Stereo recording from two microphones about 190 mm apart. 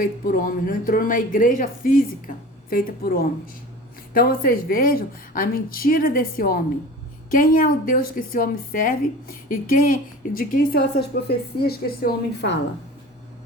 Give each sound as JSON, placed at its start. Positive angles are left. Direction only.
{"t": 0.0, "sound": "speech", "side_deg": 50}